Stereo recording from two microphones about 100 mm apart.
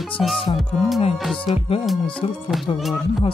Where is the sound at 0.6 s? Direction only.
Centre (ahead or behind).